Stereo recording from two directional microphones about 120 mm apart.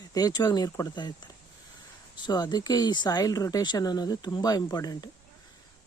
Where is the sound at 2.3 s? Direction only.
35° left (ahead or behind).